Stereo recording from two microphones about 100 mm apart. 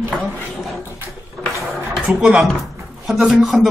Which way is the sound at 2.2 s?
10° right (ahead or behind).